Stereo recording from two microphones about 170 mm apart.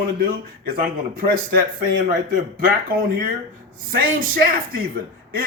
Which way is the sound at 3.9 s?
60° right (ahead or behind).